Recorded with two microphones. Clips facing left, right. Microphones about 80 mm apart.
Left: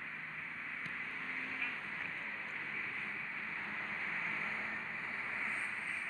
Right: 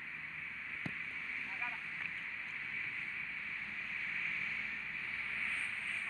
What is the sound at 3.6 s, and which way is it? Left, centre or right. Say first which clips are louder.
Vehicle: left 2 dB; left.